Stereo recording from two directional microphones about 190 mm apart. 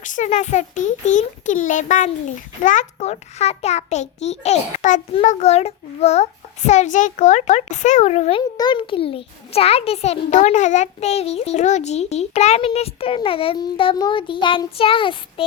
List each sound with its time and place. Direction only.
0.0 s a child's voice: 40° left (ahead or behind)
8.4 s a child's voice: 20° left (ahead or behind)